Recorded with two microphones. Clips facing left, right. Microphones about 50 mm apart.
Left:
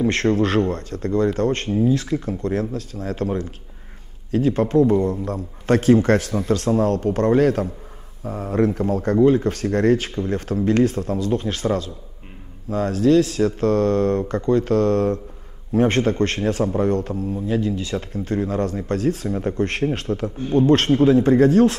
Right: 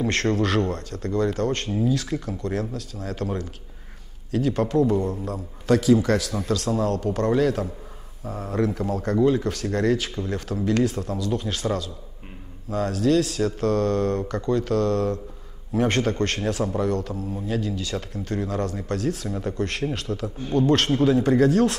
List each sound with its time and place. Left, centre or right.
0.0 s speech: left